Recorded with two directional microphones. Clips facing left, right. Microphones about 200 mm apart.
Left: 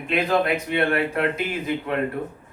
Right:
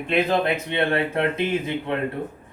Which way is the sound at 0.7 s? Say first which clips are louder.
Even; 25° right (ahead or behind).